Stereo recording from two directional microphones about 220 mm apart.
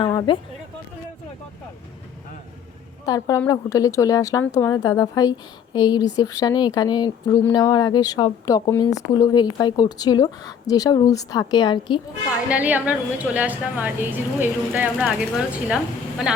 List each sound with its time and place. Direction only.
0.0 s speech: 20° left (ahead or behind)
3.1 s speech: 15° left (ahead or behind)
12.5 s a woman's voice: 5° right (ahead or behind)